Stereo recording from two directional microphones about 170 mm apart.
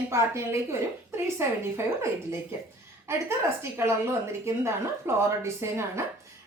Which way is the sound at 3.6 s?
15° right (ahead or behind).